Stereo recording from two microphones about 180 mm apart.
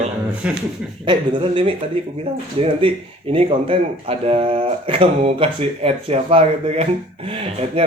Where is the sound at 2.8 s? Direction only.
30° right (ahead or behind).